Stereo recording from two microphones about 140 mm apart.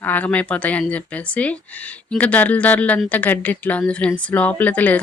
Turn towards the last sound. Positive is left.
turn(degrees=10)  # may be behind; listen again after turning